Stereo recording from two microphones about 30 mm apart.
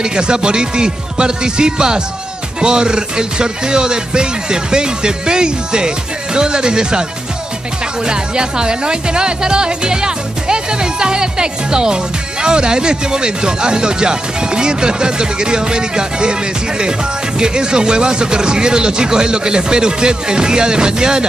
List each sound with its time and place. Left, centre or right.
0.0 s speech: right